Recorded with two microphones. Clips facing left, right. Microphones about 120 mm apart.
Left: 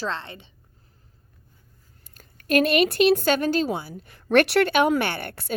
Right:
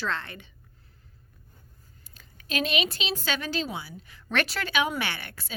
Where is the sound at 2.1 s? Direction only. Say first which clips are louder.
Left 10 dB; 55° left (ahead or behind).